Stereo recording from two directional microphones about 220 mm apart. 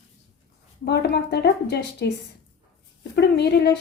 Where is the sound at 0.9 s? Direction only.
50° left (ahead or behind).